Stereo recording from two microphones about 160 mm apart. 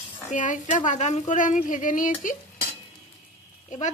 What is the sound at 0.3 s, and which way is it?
Speech, 50° left (ahead or behind).